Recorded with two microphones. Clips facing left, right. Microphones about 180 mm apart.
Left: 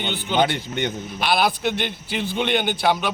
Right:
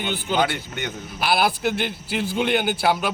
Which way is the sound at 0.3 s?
25° left (ahead or behind).